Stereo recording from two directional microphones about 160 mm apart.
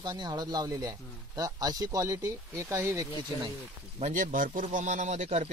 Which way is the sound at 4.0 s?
50° right (ahead or behind).